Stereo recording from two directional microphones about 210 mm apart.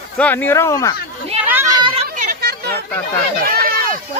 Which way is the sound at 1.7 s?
20° right (ahead or behind).